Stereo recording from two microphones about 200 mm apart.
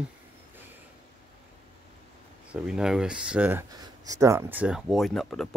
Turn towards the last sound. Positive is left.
turn(degrees=0)  # may be behind; listen again after turning